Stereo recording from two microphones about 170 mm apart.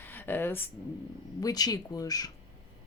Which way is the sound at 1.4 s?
20° left (ahead or behind).